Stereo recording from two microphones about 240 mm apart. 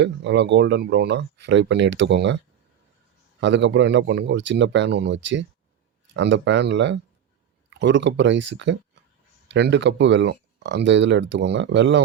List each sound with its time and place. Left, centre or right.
0.0 s speech: right
3.4 s speech: right